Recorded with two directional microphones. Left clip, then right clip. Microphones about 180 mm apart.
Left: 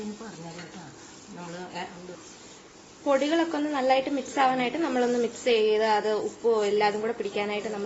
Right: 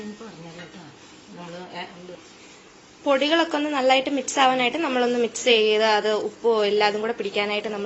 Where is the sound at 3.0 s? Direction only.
15° right (ahead or behind).